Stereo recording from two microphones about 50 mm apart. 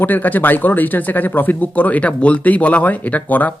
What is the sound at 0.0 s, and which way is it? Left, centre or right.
Speech, left.